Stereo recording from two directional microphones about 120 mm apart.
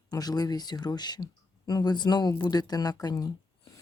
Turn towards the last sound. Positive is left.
turn(degrees=30)  # may be behind; listen again after turning